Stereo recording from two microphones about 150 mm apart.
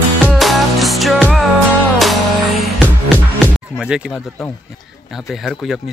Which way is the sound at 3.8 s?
5° right (ahead or behind).